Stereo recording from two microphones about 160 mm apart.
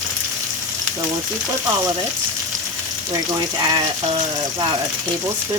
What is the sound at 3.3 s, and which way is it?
Speech, 25° right (ahead or behind).